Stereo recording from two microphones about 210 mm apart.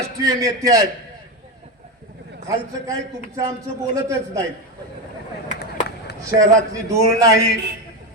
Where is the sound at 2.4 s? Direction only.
15° right (ahead or behind).